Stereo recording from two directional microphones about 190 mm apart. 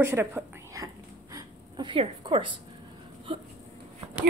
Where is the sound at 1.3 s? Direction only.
25° right (ahead or behind).